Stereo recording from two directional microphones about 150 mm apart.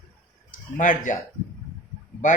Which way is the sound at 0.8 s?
60° left (ahead or behind).